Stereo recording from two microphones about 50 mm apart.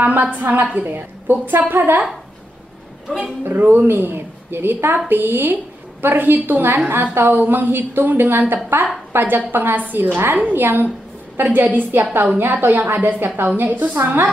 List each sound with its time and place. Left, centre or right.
0.0 s a woman's voice: right
3.4 s a woman's voice: right
4.9 s a woman's voice: right
11.3 s a woman's voice: right